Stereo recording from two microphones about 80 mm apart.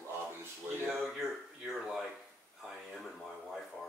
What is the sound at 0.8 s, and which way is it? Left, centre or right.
Speech, centre.